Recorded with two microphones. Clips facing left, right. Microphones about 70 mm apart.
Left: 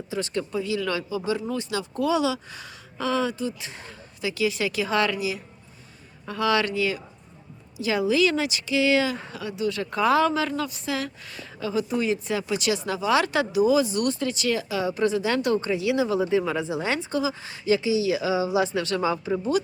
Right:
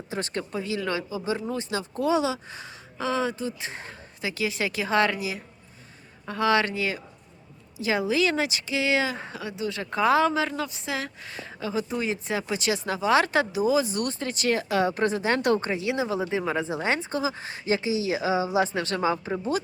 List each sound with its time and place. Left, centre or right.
0.1 s speech: right